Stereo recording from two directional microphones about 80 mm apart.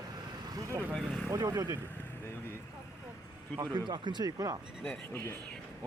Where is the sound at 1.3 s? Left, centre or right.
Right.